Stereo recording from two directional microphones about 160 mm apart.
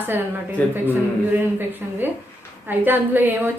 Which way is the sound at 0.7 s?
10° right (ahead or behind).